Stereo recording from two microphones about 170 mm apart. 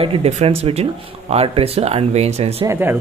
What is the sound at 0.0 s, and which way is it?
Speech, 35° right (ahead or behind).